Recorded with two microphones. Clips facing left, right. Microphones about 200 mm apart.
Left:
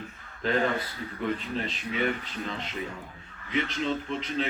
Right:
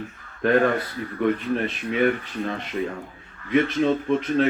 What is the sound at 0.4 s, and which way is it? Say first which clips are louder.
Speech: right 7 dB; 55° right (ahead or behind).